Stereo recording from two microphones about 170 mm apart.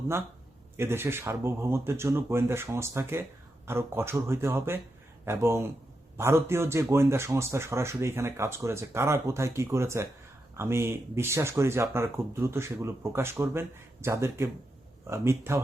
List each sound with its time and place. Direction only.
0.8 s speech: 15° right (ahead or behind)